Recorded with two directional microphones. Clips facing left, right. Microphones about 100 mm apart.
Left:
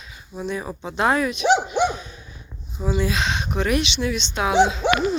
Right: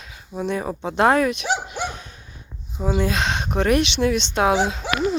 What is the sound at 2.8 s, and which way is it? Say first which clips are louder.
Speech: right 1 dB; 55° right (ahead or behind).